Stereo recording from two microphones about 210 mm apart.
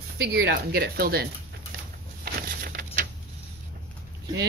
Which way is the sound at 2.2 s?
45° right (ahead or behind).